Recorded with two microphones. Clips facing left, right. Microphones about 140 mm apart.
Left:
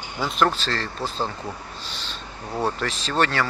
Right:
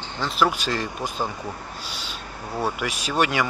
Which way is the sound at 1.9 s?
10° right (ahead or behind).